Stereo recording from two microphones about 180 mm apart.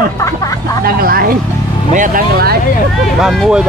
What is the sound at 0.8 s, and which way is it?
Speech, 55° right (ahead or behind).